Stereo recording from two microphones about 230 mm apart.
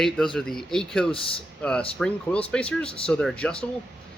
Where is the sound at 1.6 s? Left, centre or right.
Centre.